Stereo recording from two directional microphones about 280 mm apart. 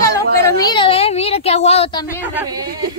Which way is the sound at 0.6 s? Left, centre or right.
Centre.